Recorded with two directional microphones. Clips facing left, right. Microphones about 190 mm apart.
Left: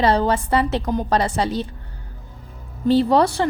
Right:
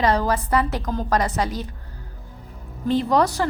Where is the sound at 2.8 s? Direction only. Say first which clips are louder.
Left 4 dB; 30° left (ahead or behind).